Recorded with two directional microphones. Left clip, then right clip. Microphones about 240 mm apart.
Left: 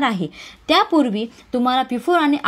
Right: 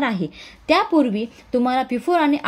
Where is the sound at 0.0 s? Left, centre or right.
Centre.